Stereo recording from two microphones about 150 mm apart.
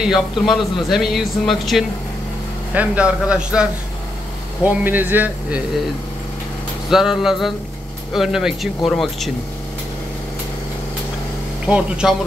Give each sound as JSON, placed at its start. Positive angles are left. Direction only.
{"t": 0.0, "sound": "a man's voice", "side_deg": 0}
{"t": 2.7, "sound": "a man's voice", "side_deg": -10}
{"t": 4.6, "sound": "a man's voice", "side_deg": -10}
{"t": 6.9, "sound": "a man's voice", "side_deg": -5}
{"t": 11.6, "sound": "a man's voice", "side_deg": -5}